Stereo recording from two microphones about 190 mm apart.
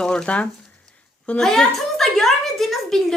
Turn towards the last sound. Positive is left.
turn(degrees=0)  # may be behind; listen again after turning